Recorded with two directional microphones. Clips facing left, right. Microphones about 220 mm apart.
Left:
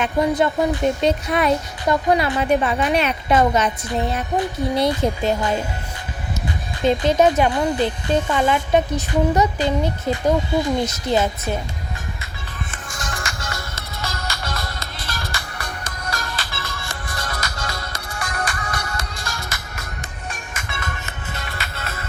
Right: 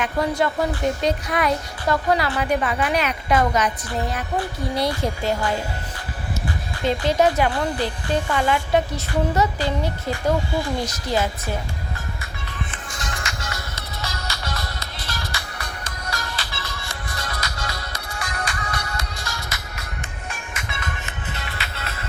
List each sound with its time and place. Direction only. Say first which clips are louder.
0.0 s speech: left 3 dB; 20° left (ahead or behind)
6.8 s speech: left 3 dB; 20° left (ahead or behind)
12.7 s music: left 1 dB; 45° left (ahead or behind)